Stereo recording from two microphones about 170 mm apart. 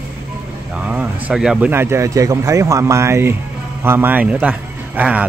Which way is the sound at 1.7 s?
15° right (ahead or behind).